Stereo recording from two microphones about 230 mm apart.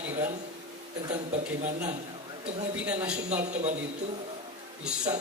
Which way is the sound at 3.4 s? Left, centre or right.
Right.